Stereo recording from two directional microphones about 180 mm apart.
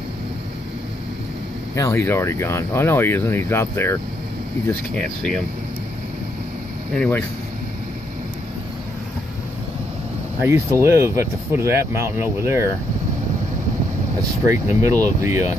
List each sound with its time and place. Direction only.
1.8 s speech: 15° left (ahead or behind)
7.0 s speech: 10° left (ahead or behind)
10.4 s speech: 15° right (ahead or behind)
14.5 s speech: 15° right (ahead or behind)